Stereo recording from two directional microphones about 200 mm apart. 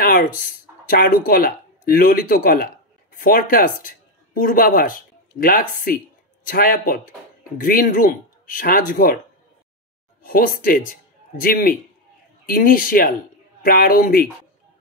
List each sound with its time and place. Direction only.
0.0 s speech: 45° left (ahead or behind)
10.2 s speech: 45° left (ahead or behind)